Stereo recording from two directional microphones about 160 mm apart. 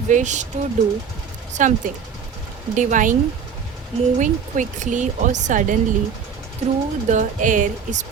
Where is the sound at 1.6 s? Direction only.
50° right (ahead or behind).